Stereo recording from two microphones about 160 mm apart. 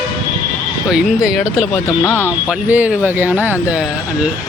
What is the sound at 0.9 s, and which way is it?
Speech, 5° right (ahead or behind).